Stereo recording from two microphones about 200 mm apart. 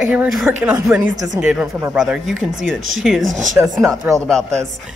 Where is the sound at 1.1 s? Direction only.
20° right (ahead or behind).